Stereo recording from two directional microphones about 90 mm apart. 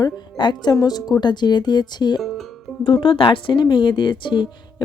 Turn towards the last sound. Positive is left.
turn(degrees=65)  # may be behind; listen again after turning